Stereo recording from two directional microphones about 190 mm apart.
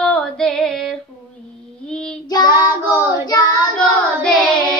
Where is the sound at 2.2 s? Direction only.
20° left (ahead or behind).